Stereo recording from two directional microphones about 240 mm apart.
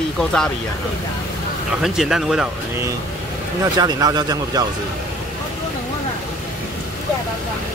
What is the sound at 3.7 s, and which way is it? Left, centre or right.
Speech, centre.